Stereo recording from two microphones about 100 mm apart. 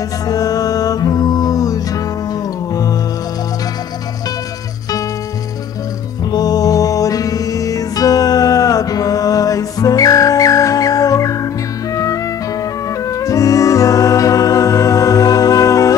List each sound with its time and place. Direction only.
0.3 s music: 40° left (ahead or behind)
6.3 s music: 40° left (ahead or behind)
13.2 s music: 35° left (ahead or behind)